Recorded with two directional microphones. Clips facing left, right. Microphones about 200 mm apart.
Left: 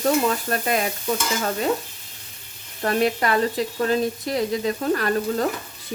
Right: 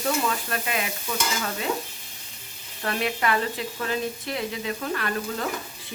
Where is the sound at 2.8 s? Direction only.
40° left (ahead or behind).